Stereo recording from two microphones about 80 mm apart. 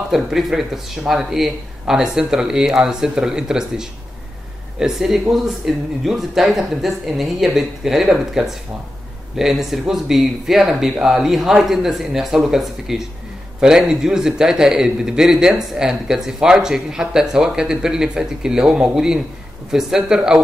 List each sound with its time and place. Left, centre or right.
0.1 s a man's voice: centre